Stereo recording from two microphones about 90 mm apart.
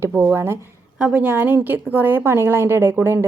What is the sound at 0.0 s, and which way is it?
Speech, 20° right (ahead or behind).